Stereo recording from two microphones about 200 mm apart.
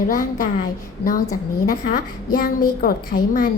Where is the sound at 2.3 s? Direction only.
45° left (ahead or behind).